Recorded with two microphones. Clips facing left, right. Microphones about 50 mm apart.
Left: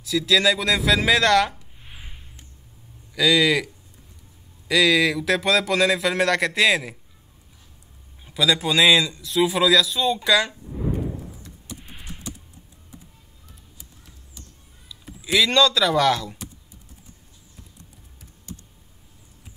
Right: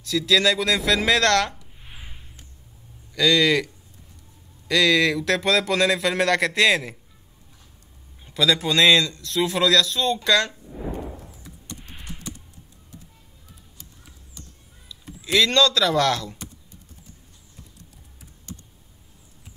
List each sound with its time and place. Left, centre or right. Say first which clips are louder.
0.0 s a man's voice: even; centre
8.3 s a man's voice: even; centre
11.8 s typing: right 1 dB; centre
14.9 s speech: even; centre